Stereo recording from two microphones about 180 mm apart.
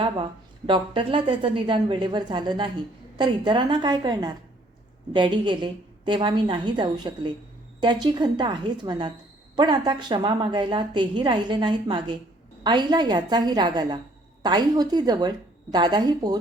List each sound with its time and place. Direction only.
0.7 s a woman's voice: 30° right (ahead or behind)